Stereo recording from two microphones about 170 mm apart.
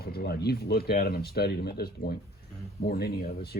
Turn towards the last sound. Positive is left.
turn(degrees=65)  # may be behind; listen again after turning